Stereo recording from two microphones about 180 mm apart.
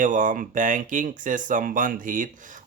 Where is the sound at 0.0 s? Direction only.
45° right (ahead or behind).